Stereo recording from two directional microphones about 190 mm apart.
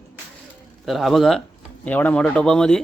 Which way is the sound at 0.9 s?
Centre (ahead or behind).